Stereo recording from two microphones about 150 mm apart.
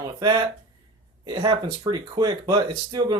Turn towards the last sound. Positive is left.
turn(degrees=-30)  # may be behind; listen again after turning